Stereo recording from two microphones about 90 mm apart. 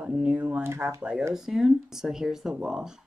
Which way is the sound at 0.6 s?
30° right (ahead or behind).